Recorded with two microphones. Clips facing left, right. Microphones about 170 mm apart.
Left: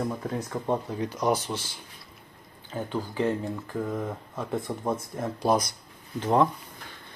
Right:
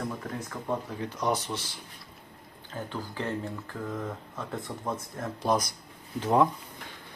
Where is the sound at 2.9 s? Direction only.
15° left (ahead or behind).